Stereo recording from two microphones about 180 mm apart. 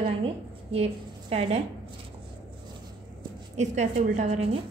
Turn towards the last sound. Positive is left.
turn(degrees=-35)  # may be behind; listen again after turning